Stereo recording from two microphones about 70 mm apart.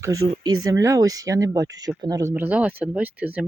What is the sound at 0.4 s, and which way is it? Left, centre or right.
Speech, right.